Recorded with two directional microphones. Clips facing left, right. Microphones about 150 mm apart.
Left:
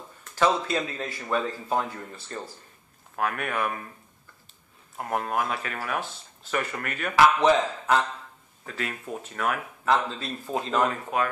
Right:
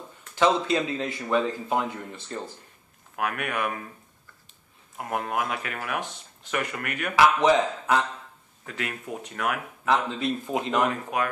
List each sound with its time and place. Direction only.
0.4 s speech: 25° right (ahead or behind)
5.1 s speech: 15° right (ahead or behind)
8.6 s speech: 25° left (ahead or behind)
9.1 s speech: 15° right (ahead or behind)